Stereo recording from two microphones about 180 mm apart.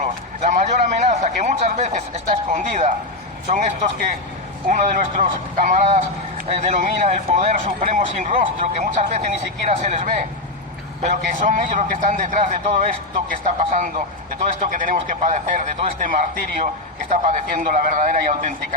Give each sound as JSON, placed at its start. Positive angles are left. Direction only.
{"t": 0.4, "sound": "a man's voice", "side_deg": -40}